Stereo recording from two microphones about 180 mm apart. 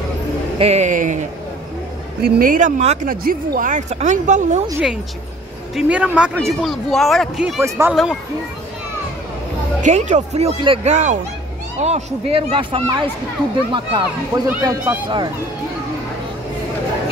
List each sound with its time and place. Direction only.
0.6 s speech: 35° right (ahead or behind)
2.2 s speech: 50° right (ahead or behind)
3.1 s speech: 50° right (ahead or behind)
5.8 s speech: 5° right (ahead or behind)
7.6 s speech: 15° right (ahead or behind)
7.9 s speech: centre (ahead or behind)
9.8 s speech: 40° right (ahead or behind); by 14.4 s 25° right (ahead or behind)
14.5 s speech: 15° right (ahead or behind)